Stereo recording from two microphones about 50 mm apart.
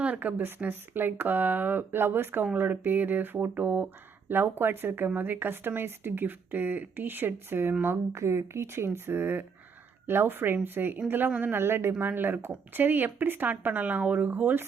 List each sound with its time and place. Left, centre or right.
0.0 s speech: right
8.1 s speech: right
11.6 s speech: right